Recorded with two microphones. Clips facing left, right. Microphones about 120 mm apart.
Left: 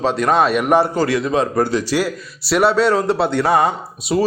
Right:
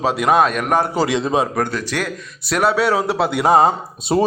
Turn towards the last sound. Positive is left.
turn(degrees=-30)  # may be behind; listen again after turning